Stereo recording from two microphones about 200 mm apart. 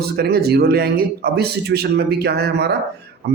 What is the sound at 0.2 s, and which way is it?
A man's voice, 50° right (ahead or behind).